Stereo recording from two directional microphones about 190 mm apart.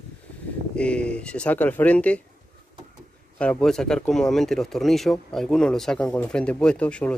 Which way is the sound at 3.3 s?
5° left (ahead or behind).